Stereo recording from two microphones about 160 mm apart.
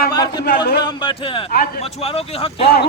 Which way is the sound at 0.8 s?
30° left (ahead or behind).